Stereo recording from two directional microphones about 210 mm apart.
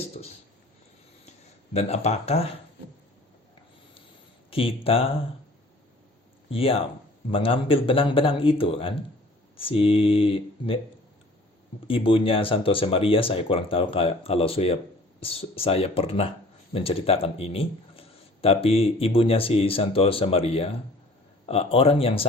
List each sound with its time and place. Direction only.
0.1 s a sound: 30° left (ahead or behind)
1.7 s speech: 30° left (ahead or behind)
4.5 s speech: 25° left (ahead or behind)
6.5 s speech: 25° left (ahead or behind)
11.9 s speech: 25° left (ahead or behind)